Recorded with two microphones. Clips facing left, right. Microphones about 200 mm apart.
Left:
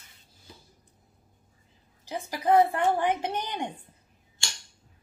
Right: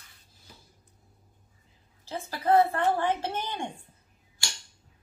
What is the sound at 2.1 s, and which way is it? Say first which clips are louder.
A woman's voice: left 1 dB; 15° left (ahead or behind).